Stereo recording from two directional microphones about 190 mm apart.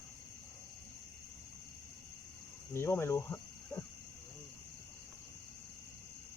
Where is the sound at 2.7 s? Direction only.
15° left (ahead or behind).